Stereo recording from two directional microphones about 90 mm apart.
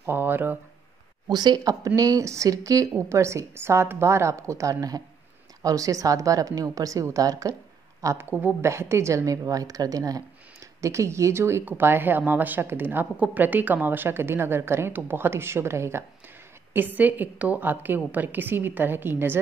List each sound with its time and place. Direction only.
0.0 s speech: 25° right (ahead or behind)
1.3 s a woman's voice: 50° right (ahead or behind)
8.2 s speech: 20° right (ahead or behind)
8.6 s a woman's voice: 30° right (ahead or behind)